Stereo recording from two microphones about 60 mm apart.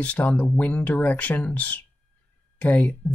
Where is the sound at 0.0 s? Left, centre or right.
Left.